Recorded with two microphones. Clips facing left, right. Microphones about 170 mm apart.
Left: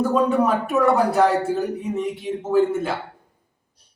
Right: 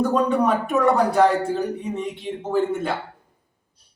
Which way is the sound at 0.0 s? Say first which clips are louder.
Left 1 dB; 5° left (ahead or behind).